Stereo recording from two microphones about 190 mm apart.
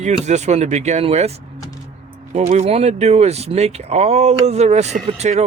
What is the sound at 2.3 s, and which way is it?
Speech, 35° right (ahead or behind).